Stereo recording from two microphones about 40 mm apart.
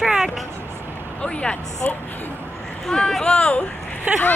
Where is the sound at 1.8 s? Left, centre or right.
Left.